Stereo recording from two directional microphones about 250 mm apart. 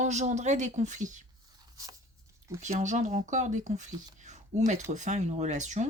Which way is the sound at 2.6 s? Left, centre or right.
Right.